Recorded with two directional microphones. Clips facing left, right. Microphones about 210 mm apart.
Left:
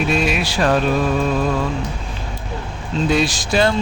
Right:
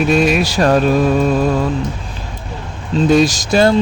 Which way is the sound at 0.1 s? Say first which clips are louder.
Right 6 dB; 45° right (ahead or behind).